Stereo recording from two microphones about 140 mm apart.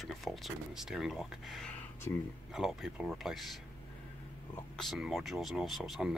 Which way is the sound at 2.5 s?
5° right (ahead or behind).